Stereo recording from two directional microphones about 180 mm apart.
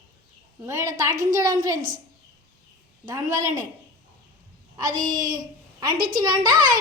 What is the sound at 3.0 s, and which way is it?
Speech, 20° right (ahead or behind).